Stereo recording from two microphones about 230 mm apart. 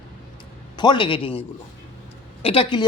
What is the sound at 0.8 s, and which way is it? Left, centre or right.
Speech, left.